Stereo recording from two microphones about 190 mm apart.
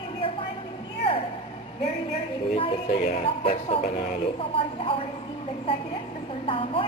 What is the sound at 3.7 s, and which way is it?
Speech, 30° left (ahead or behind).